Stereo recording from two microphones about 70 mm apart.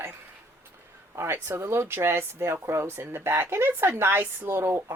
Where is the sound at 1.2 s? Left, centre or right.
Right.